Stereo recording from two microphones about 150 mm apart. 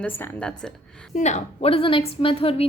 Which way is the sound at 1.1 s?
50° left (ahead or behind).